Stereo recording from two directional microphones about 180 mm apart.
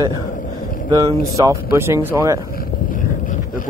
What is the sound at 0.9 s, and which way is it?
Speech, 20° right (ahead or behind).